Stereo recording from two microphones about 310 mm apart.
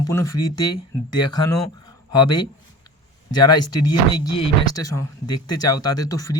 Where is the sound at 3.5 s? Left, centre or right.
Left.